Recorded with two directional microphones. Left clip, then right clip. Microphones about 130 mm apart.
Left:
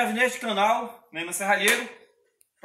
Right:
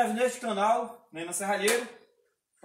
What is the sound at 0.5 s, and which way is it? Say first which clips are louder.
Speech: left 3 dB; 15° right (ahead or behind).